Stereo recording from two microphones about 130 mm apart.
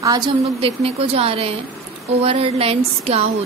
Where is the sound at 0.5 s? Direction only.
50° right (ahead or behind).